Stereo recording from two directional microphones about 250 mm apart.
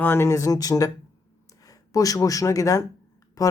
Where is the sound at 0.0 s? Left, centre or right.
Centre.